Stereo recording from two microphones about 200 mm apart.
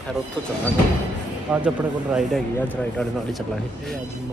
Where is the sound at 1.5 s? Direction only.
5° right (ahead or behind).